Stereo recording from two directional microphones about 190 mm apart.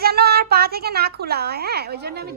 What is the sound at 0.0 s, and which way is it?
A child's voice, 55° right (ahead or behind).